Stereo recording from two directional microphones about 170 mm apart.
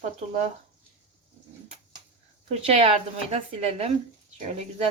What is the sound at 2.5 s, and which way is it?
A woman's voice, 40° right (ahead or behind).